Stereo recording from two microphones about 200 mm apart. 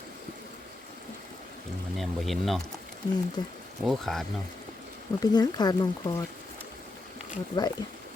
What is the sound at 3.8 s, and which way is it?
Speech, centre (ahead or behind).